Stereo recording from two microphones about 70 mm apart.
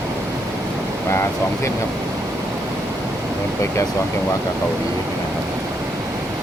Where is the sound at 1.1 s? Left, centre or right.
Left.